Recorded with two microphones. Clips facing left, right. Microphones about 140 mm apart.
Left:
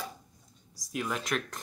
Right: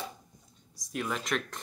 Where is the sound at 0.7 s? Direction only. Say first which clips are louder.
Even; centre (ahead or behind).